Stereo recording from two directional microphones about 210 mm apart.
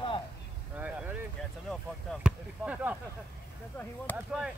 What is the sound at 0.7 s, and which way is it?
Speech, 5° right (ahead or behind).